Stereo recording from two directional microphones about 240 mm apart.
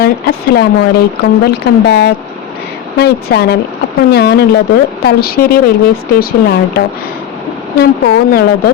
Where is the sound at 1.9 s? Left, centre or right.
Left.